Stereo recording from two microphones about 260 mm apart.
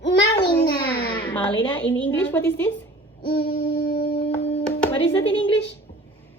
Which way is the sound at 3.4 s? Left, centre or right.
Left.